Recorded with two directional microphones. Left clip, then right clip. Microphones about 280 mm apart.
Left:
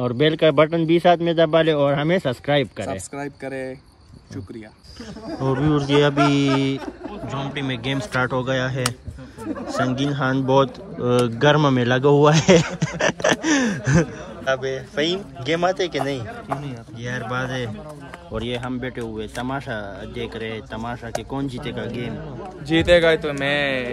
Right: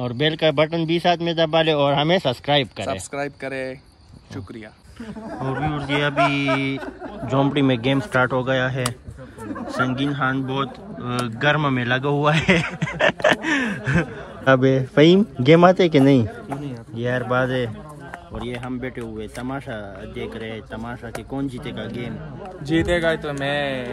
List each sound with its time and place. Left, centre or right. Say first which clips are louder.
0.0 s a man's voice: left 2 dB; centre
5.6 s speech: left 5 dB; centre
7.2 s a man's voice: right 9 dB; centre
14.4 s a man's voice: right 6 dB; centre
16.6 s a man's voice: right 6 dB; centre
18.7 s a man's voice: left 1 dB; centre